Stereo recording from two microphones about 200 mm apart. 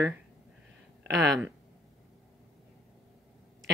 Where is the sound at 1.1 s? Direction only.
60° right (ahead or behind).